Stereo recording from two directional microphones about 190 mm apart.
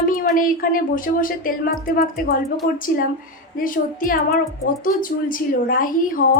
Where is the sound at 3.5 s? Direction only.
45° left (ahead or behind).